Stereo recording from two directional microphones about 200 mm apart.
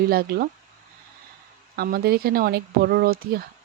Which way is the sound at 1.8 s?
50° right (ahead or behind).